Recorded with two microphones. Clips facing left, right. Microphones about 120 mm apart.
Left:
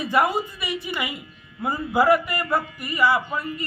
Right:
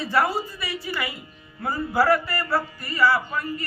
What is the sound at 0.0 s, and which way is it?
A man's voice, 15° left (ahead or behind).